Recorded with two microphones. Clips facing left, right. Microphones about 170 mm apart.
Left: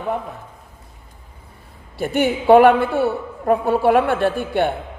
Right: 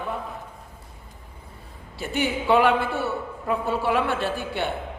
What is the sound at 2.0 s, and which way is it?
A man's voice, 50° left (ahead or behind).